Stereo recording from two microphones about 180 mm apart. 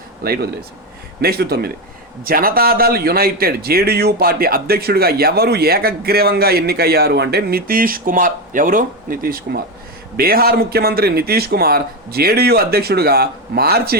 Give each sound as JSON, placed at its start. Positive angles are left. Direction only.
{"t": 0.2, "sound": "a man's voice", "side_deg": -55}